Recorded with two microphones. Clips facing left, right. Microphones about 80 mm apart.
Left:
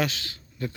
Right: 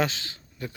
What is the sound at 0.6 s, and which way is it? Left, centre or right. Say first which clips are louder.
Speech: left 4 dB; centre.